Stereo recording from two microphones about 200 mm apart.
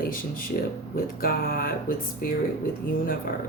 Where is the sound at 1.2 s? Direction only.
45° left (ahead or behind).